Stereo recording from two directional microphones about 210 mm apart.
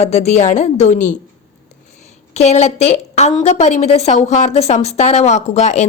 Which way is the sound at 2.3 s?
30° left (ahead or behind).